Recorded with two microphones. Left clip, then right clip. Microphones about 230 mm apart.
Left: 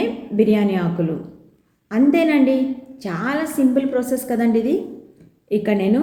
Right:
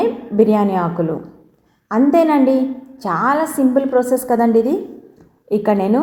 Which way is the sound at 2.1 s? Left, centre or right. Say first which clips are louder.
Right 5 dB; centre.